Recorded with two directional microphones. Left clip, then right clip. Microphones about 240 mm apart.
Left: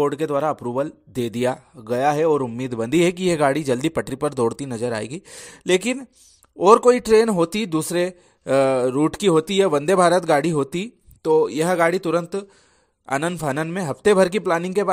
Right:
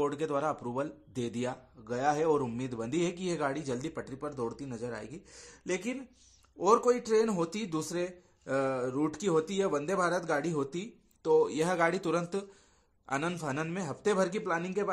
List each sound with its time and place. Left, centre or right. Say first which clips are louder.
0.0 s speech: left 10 dB; left